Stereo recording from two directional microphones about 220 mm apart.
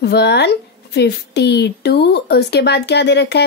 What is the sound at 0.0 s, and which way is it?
A woman's voice, 50° left (ahead or behind).